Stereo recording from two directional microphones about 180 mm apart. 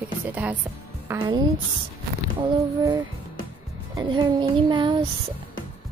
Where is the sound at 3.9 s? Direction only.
25° right (ahead or behind).